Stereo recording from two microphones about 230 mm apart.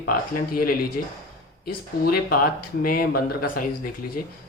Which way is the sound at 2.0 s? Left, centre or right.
Left.